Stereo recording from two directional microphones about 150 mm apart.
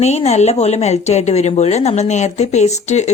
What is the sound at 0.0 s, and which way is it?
Speech, 45° left (ahead or behind).